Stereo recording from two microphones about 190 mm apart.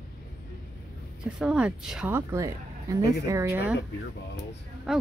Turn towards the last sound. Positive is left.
turn(degrees=0)  # may be behind; listen again after turning